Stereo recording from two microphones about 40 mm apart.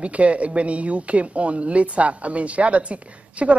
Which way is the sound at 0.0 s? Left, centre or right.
Right.